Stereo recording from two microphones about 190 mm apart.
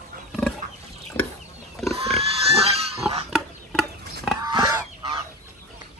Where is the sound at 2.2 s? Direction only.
30° right (ahead or behind).